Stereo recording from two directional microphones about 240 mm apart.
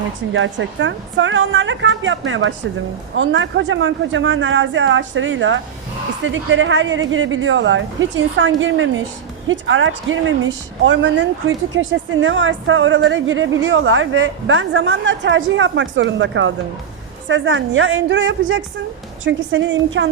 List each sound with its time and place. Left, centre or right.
0.3 s a woman's voice: right